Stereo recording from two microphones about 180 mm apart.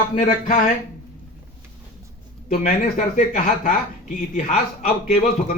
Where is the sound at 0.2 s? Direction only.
45° left (ahead or behind).